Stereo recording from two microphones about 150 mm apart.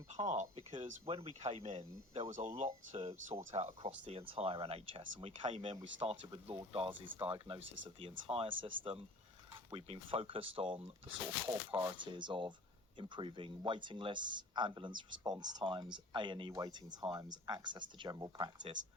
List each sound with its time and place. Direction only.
0.3 s speech: 50° right (ahead or behind); by 18.7 s 30° right (ahead or behind)